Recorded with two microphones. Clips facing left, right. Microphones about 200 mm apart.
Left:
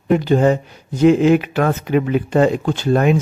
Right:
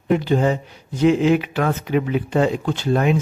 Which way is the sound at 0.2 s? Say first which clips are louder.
Left 4 dB; 45° left (ahead or behind).